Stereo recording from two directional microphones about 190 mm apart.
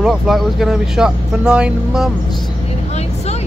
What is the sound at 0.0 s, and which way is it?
Speech, centre (ahead or behind).